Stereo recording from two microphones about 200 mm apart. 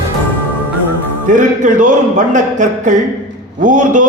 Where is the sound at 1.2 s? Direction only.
40° right (ahead or behind).